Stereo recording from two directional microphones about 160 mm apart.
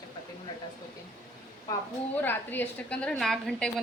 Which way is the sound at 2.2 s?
10° left (ahead or behind).